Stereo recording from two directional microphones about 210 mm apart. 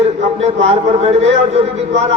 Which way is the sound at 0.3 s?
30° right (ahead or behind).